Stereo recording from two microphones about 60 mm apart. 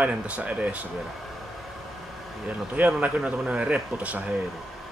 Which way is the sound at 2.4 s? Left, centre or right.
Right.